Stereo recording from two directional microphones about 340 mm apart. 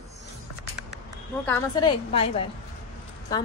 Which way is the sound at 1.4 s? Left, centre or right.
Centre.